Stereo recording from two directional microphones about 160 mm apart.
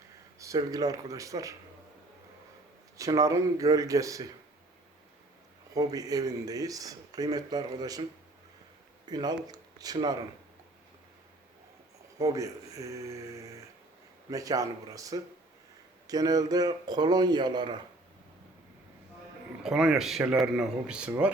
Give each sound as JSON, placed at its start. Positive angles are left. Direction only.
{"t": 0.3, "sound": "speech", "side_deg": -20}
{"t": 3.0, "sound": "speech", "side_deg": -20}
{"t": 5.7, "sound": "speech", "side_deg": -20}
{"t": 9.0, "sound": "speech", "side_deg": -25}
{"t": 12.2, "sound": "speech", "side_deg": -20}
{"t": 19.6, "sound": "speech", "side_deg": -5}